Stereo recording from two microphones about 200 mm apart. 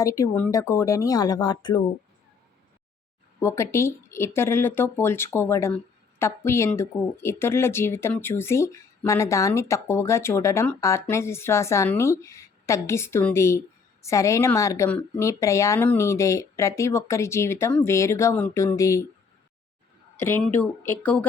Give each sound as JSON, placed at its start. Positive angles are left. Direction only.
{"t": 0.0, "sound": "speech", "side_deg": 15}
{"t": 3.4, "sound": "speech", "side_deg": 15}
{"t": 20.1, "sound": "speech", "side_deg": 10}